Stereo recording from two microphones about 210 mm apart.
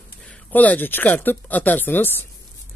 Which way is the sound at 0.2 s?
5° left (ahead or behind).